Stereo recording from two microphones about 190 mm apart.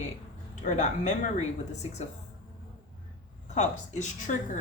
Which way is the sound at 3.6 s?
35° left (ahead or behind).